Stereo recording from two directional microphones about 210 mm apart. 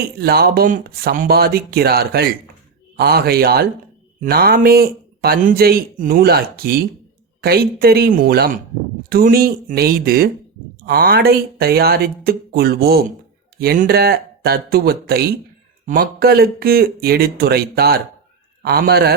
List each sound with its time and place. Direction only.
0.2 s speech: 45° right (ahead or behind)